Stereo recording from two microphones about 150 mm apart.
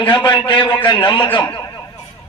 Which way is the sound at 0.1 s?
30° left (ahead or behind).